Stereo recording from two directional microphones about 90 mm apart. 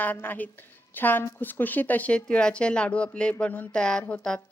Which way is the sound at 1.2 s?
30° left (ahead or behind).